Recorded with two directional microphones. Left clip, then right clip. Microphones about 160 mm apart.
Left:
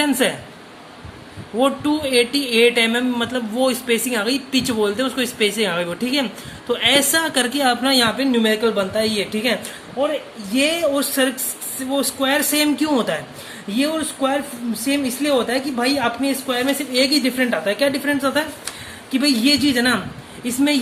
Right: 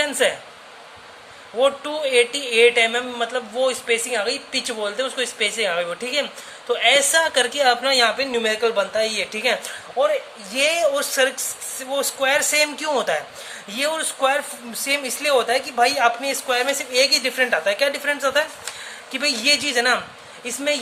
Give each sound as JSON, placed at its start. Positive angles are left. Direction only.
{"t": 0.0, "sound": "a man's voice", "side_deg": 0}
{"t": 1.5, "sound": "a man's voice", "side_deg": -5}
{"t": 13.7, "sound": "a man's voice", "side_deg": -30}